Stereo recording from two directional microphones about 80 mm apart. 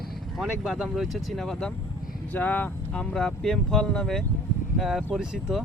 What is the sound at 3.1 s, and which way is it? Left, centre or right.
Speech, centre.